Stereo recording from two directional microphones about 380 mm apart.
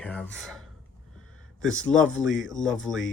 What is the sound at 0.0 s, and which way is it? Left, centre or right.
Speech, centre.